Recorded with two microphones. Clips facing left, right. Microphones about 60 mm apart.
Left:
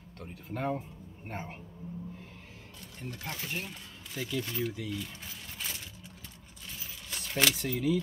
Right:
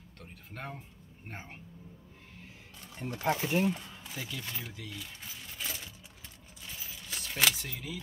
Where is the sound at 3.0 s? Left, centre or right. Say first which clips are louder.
Right 9 dB; right.